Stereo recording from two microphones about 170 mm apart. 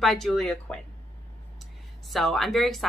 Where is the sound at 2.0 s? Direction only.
Centre (ahead or behind).